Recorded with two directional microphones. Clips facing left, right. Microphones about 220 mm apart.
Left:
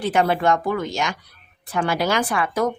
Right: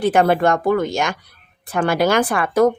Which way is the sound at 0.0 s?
50° right (ahead or behind).